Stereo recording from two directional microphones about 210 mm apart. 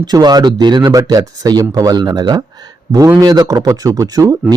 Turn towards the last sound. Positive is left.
turn(degrees=-15)  # may be behind; listen again after turning